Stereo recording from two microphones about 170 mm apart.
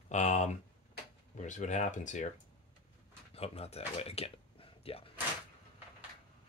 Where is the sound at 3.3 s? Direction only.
35° left (ahead or behind).